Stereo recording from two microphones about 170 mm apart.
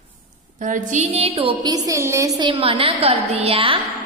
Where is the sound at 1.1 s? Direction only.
35° right (ahead or behind).